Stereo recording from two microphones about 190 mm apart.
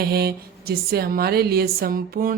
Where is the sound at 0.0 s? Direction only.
55° right (ahead or behind).